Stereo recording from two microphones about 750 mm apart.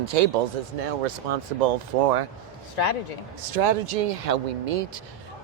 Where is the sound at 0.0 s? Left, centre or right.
Right.